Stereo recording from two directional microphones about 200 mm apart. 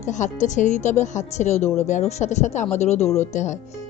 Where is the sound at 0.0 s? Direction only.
35° left (ahead or behind).